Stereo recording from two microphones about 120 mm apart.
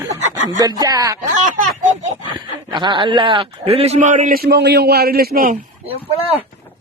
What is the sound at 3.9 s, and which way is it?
Speech, 90° right.